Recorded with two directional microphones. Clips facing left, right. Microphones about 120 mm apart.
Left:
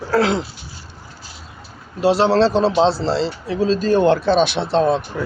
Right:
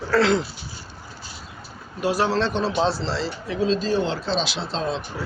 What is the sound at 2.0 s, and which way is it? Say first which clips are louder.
Speech: left 7 dB; 30° left (ahead or behind).